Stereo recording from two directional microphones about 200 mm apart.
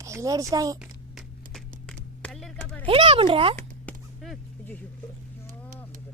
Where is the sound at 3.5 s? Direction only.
5° left (ahead or behind).